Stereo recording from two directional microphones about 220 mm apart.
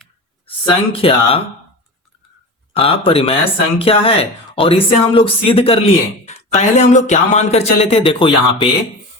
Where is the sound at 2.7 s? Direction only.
25° left (ahead or behind).